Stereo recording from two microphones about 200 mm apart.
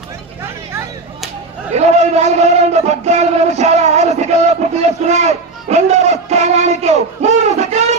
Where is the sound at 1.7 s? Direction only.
35° right (ahead or behind).